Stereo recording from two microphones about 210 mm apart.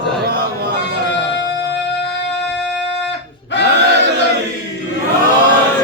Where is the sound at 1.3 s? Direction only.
55° left (ahead or behind).